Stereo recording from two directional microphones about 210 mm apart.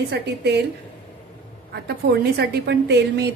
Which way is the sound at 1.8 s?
50° right (ahead or behind).